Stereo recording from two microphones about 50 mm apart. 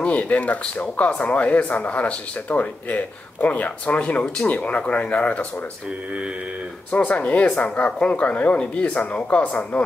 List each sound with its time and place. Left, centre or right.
0.0 s speech: left
6.9 s speech: left